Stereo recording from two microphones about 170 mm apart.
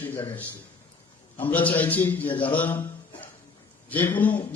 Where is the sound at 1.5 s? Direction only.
10° left (ahead or behind).